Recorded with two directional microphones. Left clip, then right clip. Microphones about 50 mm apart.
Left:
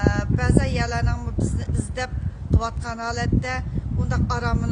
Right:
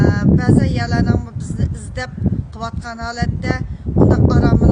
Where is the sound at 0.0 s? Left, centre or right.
Right.